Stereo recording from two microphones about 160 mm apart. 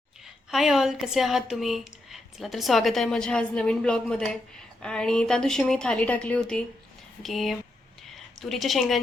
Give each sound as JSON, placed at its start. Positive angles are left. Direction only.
{"t": 0.5, "sound": "speech", "side_deg": 0}